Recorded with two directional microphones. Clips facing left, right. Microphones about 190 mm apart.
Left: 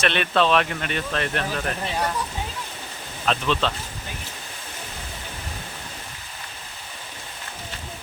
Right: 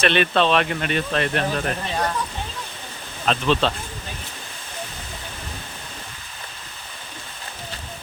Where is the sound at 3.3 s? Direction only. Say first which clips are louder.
Right 3 dB; 30° right (ahead or behind).